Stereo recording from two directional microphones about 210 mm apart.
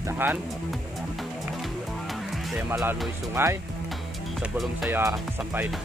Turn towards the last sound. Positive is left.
turn(degrees=-5)  # may be behind; listen again after turning